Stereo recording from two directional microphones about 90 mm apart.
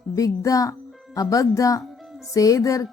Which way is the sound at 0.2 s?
40° left (ahead or behind).